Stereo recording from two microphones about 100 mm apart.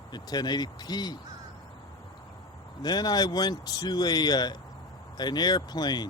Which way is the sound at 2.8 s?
45° left (ahead or behind).